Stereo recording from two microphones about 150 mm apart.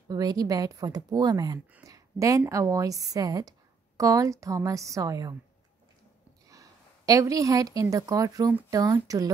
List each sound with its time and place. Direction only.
0.1 s a woman's voice: 25° right (ahead or behind)
6.5 s a woman's voice: 20° right (ahead or behind)